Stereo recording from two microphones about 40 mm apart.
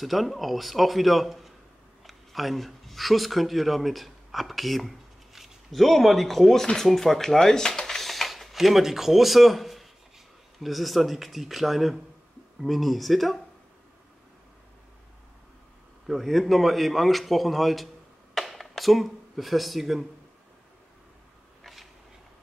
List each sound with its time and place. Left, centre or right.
0.0 s a man's voice: centre
16.1 s a man's voice: centre
18.3 s a sound: centre